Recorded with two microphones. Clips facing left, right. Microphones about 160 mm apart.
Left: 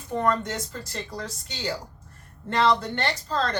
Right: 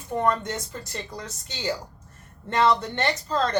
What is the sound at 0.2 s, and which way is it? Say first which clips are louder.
Speech: even; 15° right (ahead or behind).